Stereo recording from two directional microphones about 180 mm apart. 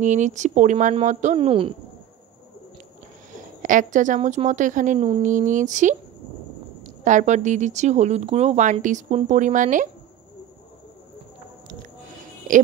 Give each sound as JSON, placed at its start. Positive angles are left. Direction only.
{"t": 0.0, "sound": "a woman's voice", "side_deg": -40}
{"t": 3.6, "sound": "a woman's voice", "side_deg": -45}
{"t": 7.1, "sound": "speech", "side_deg": -45}